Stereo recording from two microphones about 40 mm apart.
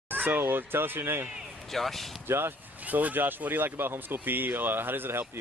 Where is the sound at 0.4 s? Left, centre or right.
Right.